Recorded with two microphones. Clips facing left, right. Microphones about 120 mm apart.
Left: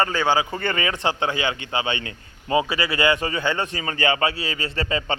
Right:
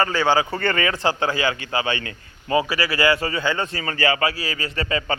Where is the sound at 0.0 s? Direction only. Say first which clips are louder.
Right 1 dB; 20° left (ahead or behind).